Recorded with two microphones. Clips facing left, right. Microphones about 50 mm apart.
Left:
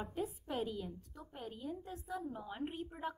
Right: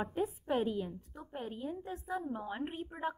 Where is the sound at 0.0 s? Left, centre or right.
Right.